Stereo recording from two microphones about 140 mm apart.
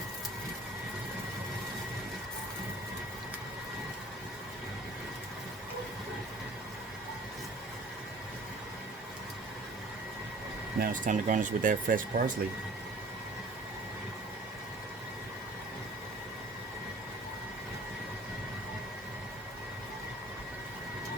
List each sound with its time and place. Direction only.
10.8 s speech: 80° right